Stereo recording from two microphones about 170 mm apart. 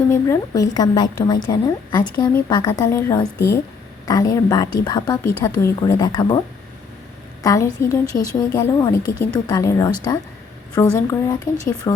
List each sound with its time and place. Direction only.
0.1 s a woman's voice: 20° left (ahead or behind)
7.4 s a woman's voice: 20° left (ahead or behind)